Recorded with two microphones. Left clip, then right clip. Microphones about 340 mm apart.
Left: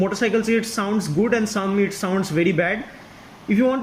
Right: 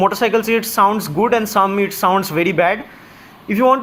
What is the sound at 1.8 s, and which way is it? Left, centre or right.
Speech, centre.